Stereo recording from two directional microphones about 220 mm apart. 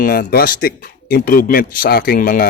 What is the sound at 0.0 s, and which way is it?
A man's voice, 40° left (ahead or behind).